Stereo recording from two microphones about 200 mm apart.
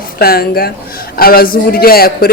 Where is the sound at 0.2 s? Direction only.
50° left (ahead or behind).